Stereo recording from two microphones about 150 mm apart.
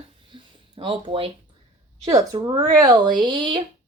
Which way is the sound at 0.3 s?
30° right (ahead or behind).